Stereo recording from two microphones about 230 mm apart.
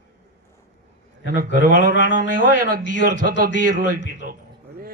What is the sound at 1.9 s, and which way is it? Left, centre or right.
Speech, left.